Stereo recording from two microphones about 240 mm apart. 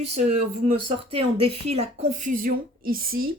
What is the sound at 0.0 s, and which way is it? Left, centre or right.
Speech, right.